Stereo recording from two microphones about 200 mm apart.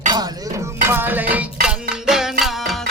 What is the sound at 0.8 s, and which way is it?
Music, 10° right (ahead or behind).